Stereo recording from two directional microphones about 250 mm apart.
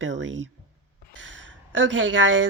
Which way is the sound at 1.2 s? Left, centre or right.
Right.